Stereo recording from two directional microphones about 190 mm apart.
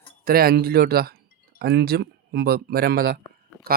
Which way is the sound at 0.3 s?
50° right (ahead or behind).